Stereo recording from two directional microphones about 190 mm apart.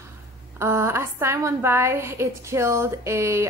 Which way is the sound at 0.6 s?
15° right (ahead or behind).